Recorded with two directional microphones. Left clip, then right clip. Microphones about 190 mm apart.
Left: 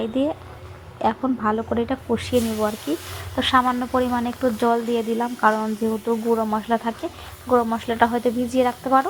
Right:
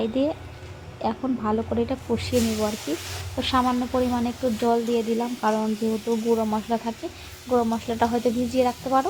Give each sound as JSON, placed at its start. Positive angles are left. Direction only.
{"t": 0.1, "sound": "speech", "side_deg": 15}